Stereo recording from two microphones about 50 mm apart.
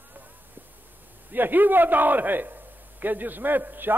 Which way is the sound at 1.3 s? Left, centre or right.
Right.